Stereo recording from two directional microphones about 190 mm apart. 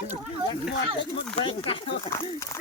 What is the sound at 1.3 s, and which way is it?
Speech, 30° left (ahead or behind).